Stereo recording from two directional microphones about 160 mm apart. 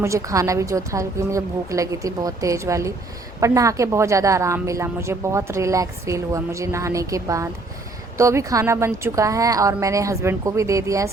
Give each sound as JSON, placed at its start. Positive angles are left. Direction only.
{"t": 0.0, "sound": "a woman's voice", "side_deg": -20}